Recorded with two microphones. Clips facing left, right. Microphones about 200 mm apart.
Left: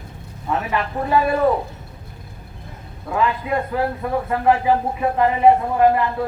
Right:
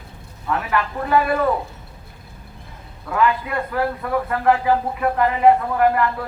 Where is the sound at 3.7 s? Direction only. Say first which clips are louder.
Even; 20° left (ahead or behind).